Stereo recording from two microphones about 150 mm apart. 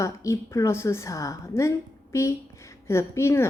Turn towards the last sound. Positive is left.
turn(degrees=20)  # may be behind; listen again after turning